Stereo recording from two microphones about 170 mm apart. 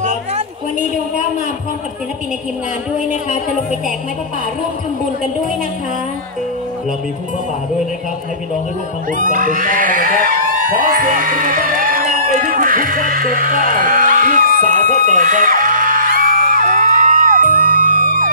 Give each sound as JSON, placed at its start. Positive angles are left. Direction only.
{"t": 9.2, "sound": "speech", "side_deg": -50}
{"t": 14.1, "sound": "music", "side_deg": -50}